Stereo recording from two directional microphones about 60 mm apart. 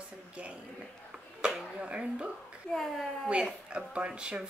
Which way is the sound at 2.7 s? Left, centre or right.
Centre.